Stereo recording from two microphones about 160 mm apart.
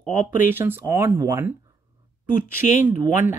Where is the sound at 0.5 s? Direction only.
15° right (ahead or behind).